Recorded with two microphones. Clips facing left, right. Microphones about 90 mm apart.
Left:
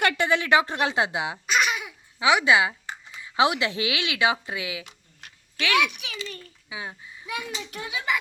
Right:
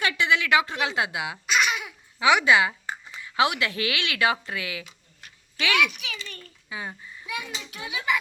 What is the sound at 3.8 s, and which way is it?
Speech, 10° left (ahead or behind).